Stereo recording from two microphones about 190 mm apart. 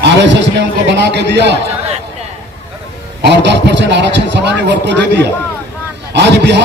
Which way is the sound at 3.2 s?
65° right (ahead or behind).